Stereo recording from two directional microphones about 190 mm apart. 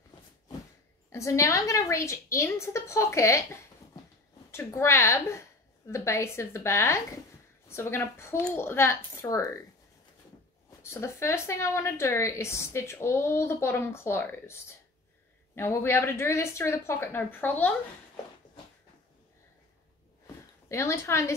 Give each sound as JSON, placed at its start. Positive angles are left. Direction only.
{"t": 1.1, "sound": "a woman's voice", "side_deg": 15}
{"t": 4.5, "sound": "a woman's voice", "side_deg": 15}
{"t": 10.8, "sound": "a woman's voice", "side_deg": 15}
{"t": 20.6, "sound": "a woman's voice", "side_deg": 15}